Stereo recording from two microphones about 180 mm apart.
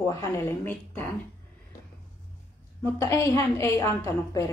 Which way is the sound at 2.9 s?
15° left (ahead or behind).